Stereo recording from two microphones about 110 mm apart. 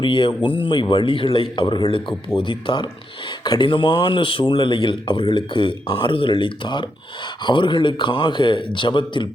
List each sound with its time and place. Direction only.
0.0 s speech: 45° left (ahead or behind)